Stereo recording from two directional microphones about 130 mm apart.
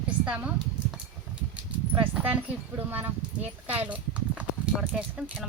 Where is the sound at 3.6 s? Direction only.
10° right (ahead or behind).